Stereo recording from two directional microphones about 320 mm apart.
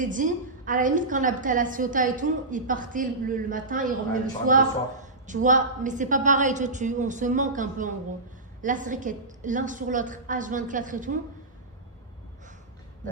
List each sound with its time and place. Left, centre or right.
0.0 s a woman's voice: right